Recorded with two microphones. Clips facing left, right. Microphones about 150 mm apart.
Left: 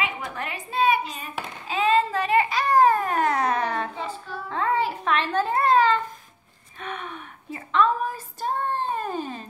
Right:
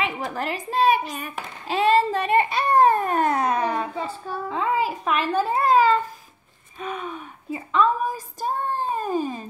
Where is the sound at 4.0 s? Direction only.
40° right (ahead or behind).